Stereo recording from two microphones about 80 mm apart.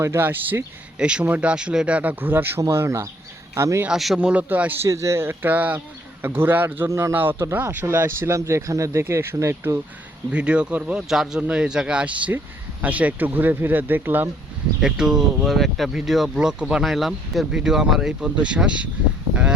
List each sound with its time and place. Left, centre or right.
0.0 s speech: right
0.9 s speech: centre
2.6 s speech: right
3.8 s speech: centre
4.2 s speech: centre
4.8 s speech: right
10.3 s speech: centre
11.1 s speech: centre; by 14.3 s right
14.8 s speech: centre